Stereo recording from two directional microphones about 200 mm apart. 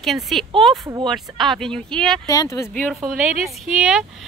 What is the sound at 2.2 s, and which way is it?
Speech, 15° left (ahead or behind).